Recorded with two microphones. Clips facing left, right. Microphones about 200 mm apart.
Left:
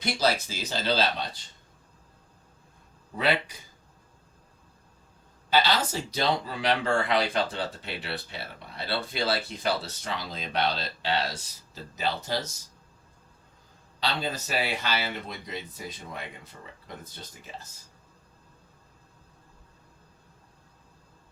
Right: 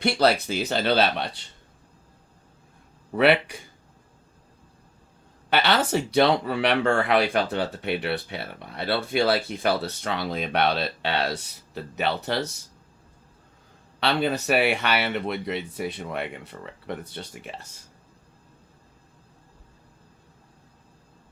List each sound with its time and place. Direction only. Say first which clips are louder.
0.0 s speech: right 6 dB; 65° right (ahead or behind)
3.2 s speech: right 7 dB; 65° right (ahead or behind)
5.5 s speech: right 3 dB; 65° right (ahead or behind)
14.0 s speech: right 7 dB; 65° right (ahead or behind)